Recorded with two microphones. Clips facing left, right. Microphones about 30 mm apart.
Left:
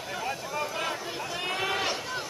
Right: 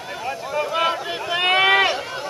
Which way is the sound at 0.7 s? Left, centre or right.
Right.